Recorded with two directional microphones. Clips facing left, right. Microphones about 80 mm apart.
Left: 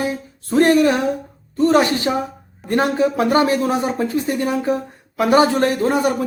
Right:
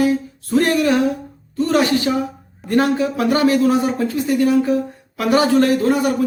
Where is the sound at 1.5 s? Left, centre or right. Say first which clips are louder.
Left 1 dB; left.